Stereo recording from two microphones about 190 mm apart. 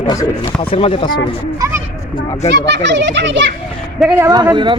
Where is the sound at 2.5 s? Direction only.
65° right (ahead or behind).